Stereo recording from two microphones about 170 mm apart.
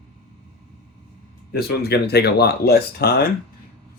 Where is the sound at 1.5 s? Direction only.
70° left (ahead or behind).